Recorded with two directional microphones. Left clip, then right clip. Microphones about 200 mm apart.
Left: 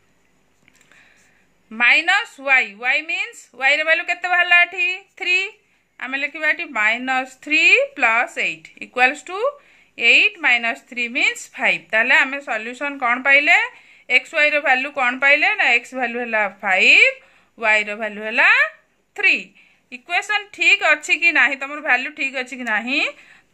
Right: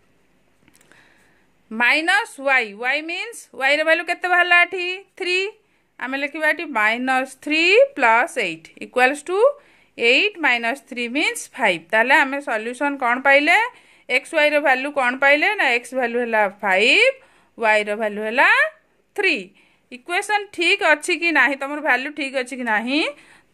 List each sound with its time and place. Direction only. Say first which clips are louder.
1.7 s a woman's voice: left 2 dB; 55° right (ahead or behind)